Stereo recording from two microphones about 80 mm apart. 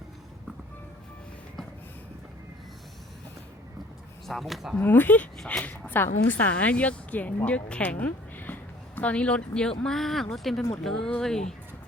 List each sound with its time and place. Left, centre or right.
4.3 s speech: centre
4.8 s a woman's voice: left; by 11.4 s centre